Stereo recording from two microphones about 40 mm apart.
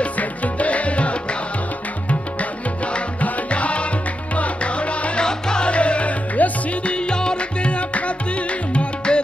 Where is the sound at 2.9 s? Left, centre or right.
Left.